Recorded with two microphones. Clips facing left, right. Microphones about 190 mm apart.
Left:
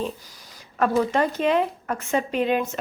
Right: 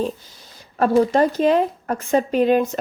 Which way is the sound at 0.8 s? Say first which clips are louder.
Right 5 dB; 35° right (ahead or behind).